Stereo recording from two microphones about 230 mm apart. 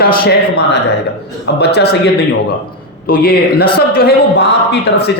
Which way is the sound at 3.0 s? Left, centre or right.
Left.